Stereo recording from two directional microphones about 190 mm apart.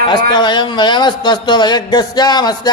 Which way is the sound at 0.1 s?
25° left (ahead or behind).